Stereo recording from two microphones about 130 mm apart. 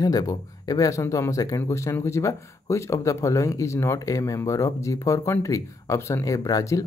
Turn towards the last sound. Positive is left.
turn(degrees=25)  # may be behind; listen again after turning